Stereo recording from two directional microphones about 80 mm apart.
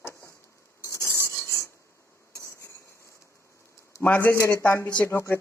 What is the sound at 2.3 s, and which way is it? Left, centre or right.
Stir, left.